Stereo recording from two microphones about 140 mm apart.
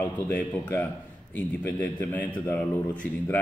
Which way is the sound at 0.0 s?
10° left (ahead or behind).